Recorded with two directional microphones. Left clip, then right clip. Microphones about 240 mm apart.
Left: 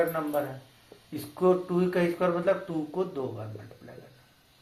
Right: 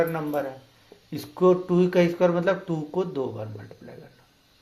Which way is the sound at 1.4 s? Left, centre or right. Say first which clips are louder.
Right 4 dB; right.